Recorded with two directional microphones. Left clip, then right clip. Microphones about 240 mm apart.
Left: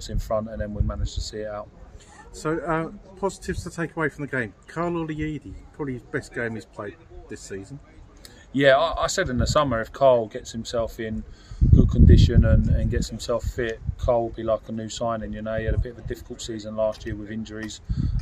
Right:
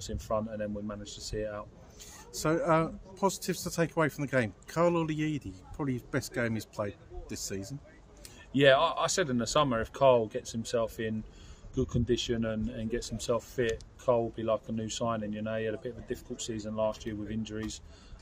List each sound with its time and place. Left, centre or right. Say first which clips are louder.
0.0 s speech: left 6 dB; centre
2.3 s a man's voice: left 1 dB; right
8.5 s speech: left 5 dB; centre